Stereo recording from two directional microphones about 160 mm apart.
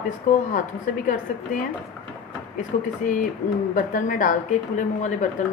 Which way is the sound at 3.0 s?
55° left (ahead or behind).